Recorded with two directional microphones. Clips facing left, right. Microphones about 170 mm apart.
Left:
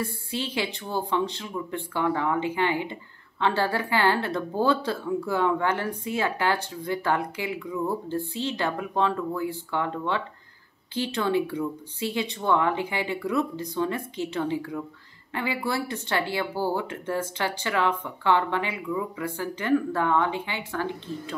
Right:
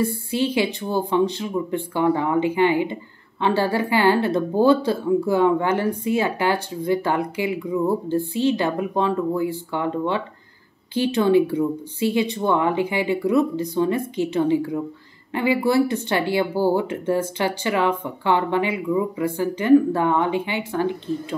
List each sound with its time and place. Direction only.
0.0 s speech: 15° right (ahead or behind)